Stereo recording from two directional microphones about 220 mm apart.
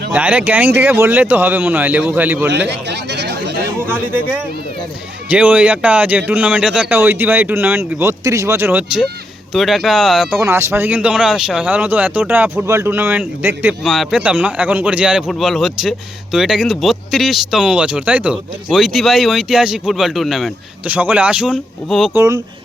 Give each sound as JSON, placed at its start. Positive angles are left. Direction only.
{"t": 0.1, "sound": "speech", "side_deg": -5}
{"t": 2.5, "sound": "a sound", "side_deg": -50}
{"t": 3.8, "sound": "speech", "side_deg": -10}
{"t": 22.1, "sound": "speech", "side_deg": -15}